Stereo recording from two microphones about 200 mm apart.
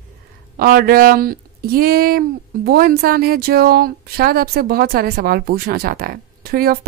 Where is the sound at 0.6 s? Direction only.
45° right (ahead or behind).